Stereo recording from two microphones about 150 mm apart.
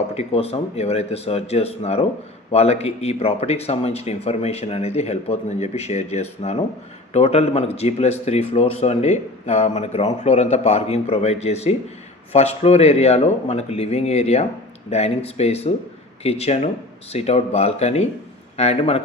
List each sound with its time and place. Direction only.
0.1 s speech: 45° left (ahead or behind)